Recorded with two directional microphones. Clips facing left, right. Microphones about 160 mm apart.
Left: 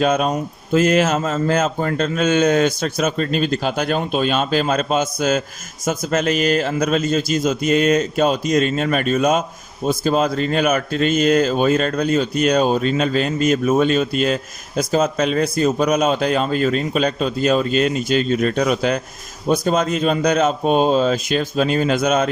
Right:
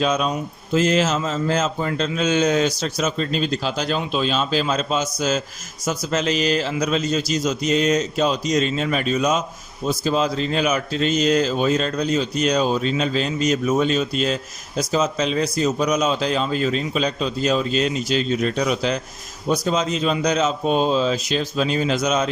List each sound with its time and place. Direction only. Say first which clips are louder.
0.0 s a man's voice: left 3 dB; 55° left (ahead or behind)